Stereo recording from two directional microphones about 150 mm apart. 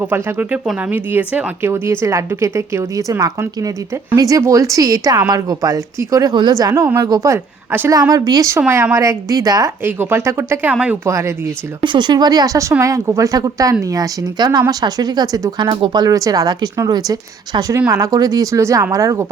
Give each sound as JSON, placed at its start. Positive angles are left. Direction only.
{"t": 0.0, "sound": "a woman's voice", "side_deg": -10}
{"t": 11.1, "sound": "a woman's voice", "side_deg": -20}
{"t": 11.8, "sound": "a woman's voice", "side_deg": -30}